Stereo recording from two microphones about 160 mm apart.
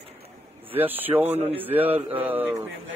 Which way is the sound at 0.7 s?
10° right (ahead or behind).